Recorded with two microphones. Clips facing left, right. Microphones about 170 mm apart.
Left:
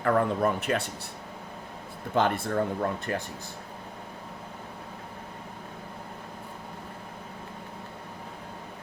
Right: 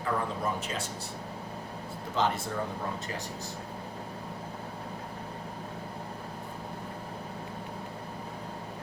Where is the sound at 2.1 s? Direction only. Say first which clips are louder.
Left 5 dB; 55° left (ahead or behind).